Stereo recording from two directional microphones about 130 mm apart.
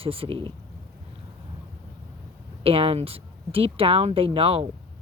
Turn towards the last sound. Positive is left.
turn(degrees=-45)  # may be behind; listen again after turning